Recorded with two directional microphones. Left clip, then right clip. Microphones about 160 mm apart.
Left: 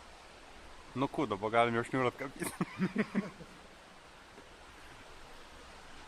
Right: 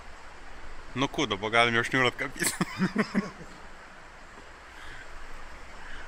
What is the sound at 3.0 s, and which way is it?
Speech, 45° right (ahead or behind).